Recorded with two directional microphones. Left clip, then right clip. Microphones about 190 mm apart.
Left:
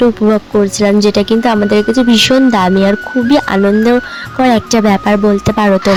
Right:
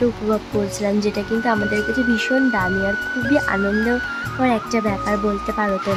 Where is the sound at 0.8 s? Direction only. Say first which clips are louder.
Left 11 dB; 35° left (ahead or behind).